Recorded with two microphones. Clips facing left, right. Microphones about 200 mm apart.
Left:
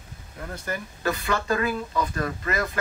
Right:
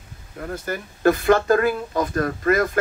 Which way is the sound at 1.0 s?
50° right (ahead or behind).